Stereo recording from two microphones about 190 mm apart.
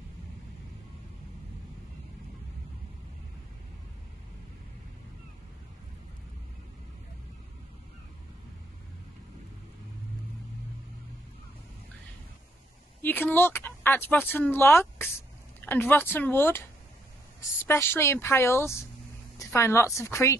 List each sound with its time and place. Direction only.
13.0 s speech: 10° left (ahead or behind)
17.6 s a woman's voice: 10° left (ahead or behind)